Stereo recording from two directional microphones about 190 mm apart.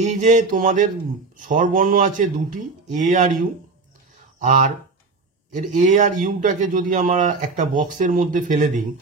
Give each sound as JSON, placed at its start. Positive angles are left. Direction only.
{"t": 0.0, "sound": "a sound", "side_deg": -40}
{"t": 1.4, "sound": "a man's voice", "side_deg": -45}
{"t": 4.4, "sound": "a man's voice", "side_deg": -40}